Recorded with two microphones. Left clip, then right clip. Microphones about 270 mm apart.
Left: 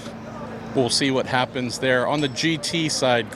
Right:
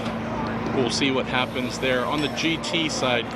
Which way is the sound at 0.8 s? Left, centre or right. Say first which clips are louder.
Left 3 dB; left.